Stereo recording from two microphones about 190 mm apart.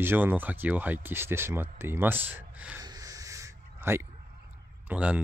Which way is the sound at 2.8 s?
20° right (ahead or behind).